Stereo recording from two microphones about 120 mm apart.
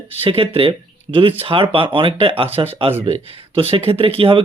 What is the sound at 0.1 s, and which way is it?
A man's voice, 55° right (ahead or behind).